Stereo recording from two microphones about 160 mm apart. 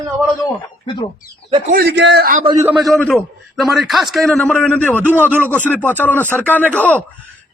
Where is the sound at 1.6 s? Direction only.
65° right (ahead or behind); by 2.3 s 90° right.